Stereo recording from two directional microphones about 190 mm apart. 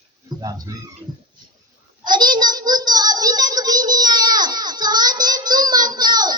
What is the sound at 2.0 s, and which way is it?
Child singing, 25° right (ahead or behind).